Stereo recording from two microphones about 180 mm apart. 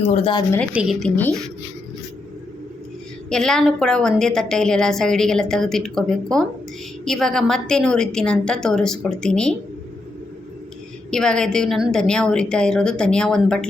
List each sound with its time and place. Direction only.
0.0 s speech: 35° left (ahead or behind)
0.7 s a woman's voice: 5° right (ahead or behind)
3.2 s a woman's voice: 5° left (ahead or behind)
11.1 s a woman's voice: 5° left (ahead or behind)